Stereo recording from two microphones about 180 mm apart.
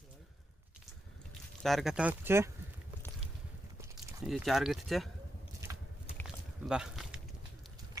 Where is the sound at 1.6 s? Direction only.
Centre (ahead or behind).